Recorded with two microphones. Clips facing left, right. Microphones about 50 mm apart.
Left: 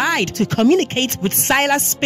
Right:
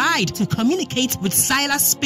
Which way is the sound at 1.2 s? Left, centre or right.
Left.